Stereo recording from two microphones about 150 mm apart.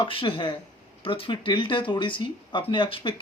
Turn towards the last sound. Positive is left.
turn(degrees=35)  # may be behind; listen again after turning